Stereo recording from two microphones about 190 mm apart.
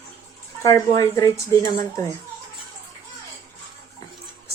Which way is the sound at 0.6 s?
15° left (ahead or behind).